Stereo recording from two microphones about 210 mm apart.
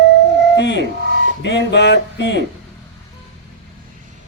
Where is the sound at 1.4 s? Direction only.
55° left (ahead or behind).